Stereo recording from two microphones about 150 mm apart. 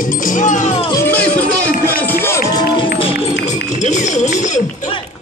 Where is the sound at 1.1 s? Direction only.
10° left (ahead or behind).